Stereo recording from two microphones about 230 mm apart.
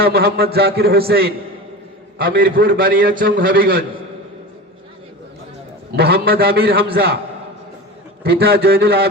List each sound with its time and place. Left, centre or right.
0.0 s a man's voice: right
2.4 s a man's voice: right
6.0 s a man's voice: right
8.2 s a man's voice: right